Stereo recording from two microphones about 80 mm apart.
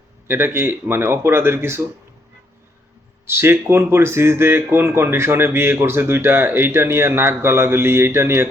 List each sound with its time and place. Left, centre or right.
0.3 s speech: right
3.2 s speech: right